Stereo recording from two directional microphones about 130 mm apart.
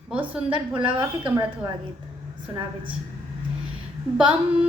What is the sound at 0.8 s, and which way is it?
Female singing, 10° right (ahead or behind).